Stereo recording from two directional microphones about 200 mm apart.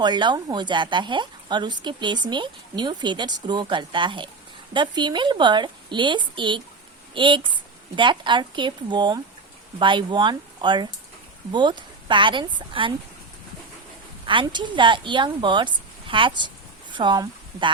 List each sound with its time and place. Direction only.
0.0 s a woman's voice: 20° right (ahead or behind)
14.3 s a woman's voice: 25° right (ahead or behind)